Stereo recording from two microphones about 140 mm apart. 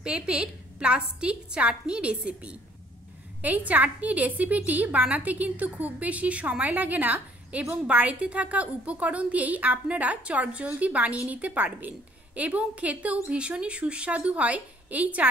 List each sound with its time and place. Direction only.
0.0 s a woman's voice: 5° right (ahead or behind)